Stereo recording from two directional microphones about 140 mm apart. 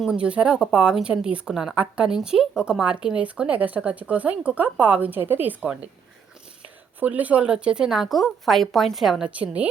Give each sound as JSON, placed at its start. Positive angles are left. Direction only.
{"t": 0.0, "sound": "speech", "side_deg": -5}
{"t": 7.0, "sound": "a woman's voice", "side_deg": -10}